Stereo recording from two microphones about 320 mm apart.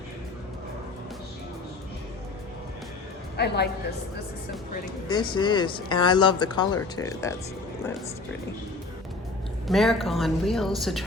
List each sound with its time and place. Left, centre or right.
3.3 s a woman's voice: left
5.0 s speech: centre
9.6 s a woman's voice: centre